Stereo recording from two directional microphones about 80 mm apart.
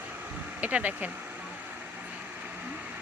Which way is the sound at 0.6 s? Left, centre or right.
Centre.